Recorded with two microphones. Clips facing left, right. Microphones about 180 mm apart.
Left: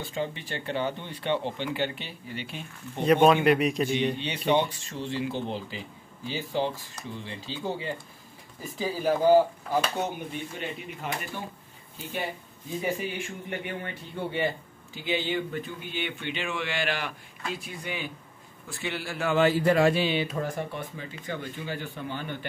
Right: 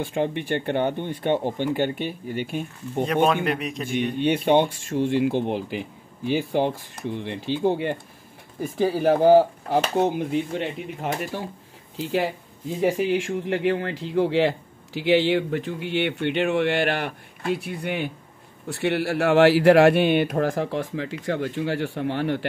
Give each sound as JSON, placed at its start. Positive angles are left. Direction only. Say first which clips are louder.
{"t": 0.0, "sound": "speech", "louder": "right 7 dB", "side_deg": -60}
{"t": 3.4, "sound": "a man's voice", "louder": "left 4 dB", "side_deg": 0}
{"t": 3.9, "sound": "speech", "louder": "right 5 dB", "side_deg": -50}
{"t": 10.1, "sound": "speech", "louder": "right 11 dB", "side_deg": -80}